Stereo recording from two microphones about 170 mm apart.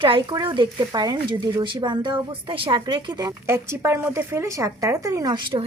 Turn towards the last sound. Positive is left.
turn(degrees=-30)  # may be behind; listen again after turning